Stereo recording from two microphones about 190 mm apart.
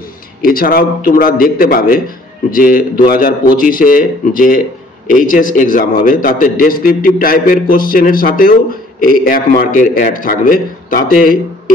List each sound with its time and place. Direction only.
0.4 s a man's voice: 50° left (ahead or behind)